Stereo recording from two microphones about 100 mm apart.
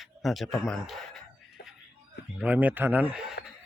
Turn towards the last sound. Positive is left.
turn(degrees=-5)  # may be behind; listen again after turning